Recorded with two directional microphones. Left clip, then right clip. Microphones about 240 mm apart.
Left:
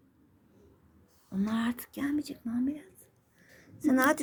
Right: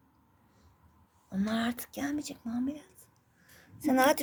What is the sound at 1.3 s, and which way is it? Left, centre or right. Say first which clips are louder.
A woman's voice: even; centre.